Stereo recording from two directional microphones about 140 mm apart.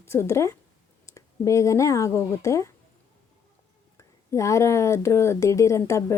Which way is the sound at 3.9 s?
20° left (ahead or behind).